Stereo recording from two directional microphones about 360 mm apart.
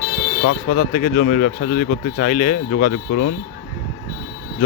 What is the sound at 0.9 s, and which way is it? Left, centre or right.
Speech, left.